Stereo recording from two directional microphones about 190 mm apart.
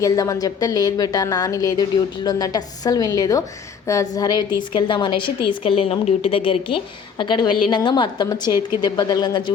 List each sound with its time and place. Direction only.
0.0 s a woman's voice: 20° left (ahead or behind)